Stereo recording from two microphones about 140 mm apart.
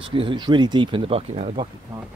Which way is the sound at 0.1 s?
40° right (ahead or behind).